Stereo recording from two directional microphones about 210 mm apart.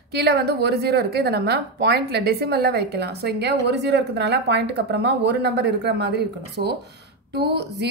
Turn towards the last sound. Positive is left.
turn(degrees=-50)  # may be behind; listen again after turning